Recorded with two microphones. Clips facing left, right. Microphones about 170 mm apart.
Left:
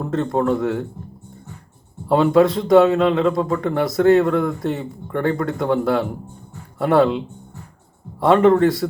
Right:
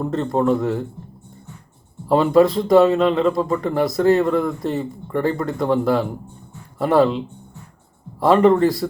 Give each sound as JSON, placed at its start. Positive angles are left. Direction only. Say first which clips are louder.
{"t": 0.0, "sound": "speech", "louder": "even", "side_deg": 0}
{"t": 2.0, "sound": "speech", "louder": "even", "side_deg": 0}
{"t": 8.2, "sound": "speech", "louder": "even", "side_deg": 0}